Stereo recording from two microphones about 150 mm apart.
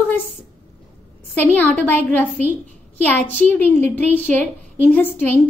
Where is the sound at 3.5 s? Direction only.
10° left (ahead or behind).